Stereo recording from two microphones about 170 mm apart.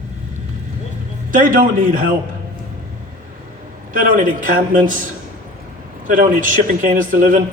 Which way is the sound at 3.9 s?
50° right (ahead or behind).